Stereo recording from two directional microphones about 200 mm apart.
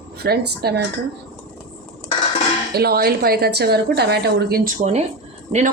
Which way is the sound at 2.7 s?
50° right (ahead or behind).